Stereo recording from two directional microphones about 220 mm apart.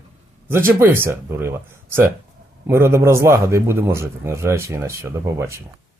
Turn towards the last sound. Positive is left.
turn(degrees=-10)  # may be behind; listen again after turning